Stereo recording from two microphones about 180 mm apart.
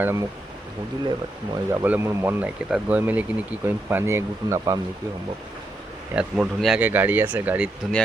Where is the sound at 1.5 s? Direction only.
15° right (ahead or behind).